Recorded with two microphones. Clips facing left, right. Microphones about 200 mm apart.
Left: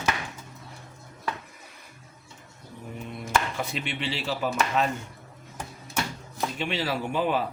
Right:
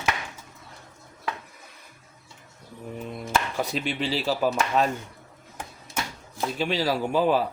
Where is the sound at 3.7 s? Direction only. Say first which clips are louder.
Right 4 dB; 35° right (ahead or behind).